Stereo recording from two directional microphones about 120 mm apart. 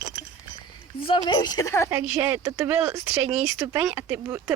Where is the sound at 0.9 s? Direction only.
45° left (ahead or behind).